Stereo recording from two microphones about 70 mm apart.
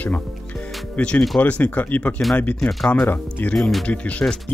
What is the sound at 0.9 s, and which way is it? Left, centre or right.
Speech, centre.